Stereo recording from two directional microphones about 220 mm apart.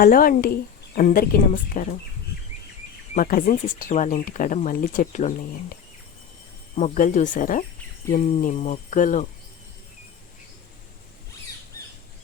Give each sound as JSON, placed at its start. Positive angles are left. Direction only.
{"t": 0.0, "sound": "speech", "side_deg": 40}
{"t": 3.2, "sound": "speech", "side_deg": 40}
{"t": 6.7, "sound": "speech", "side_deg": 35}